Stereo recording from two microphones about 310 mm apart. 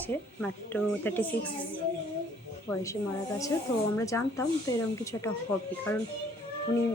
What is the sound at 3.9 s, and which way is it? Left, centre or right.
Speech, centre.